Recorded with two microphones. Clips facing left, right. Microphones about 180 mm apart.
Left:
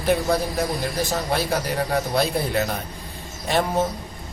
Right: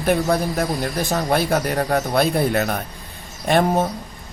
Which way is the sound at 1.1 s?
55° right (ahead or behind).